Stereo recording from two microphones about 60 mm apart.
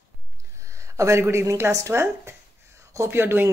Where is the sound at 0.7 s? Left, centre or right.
Right.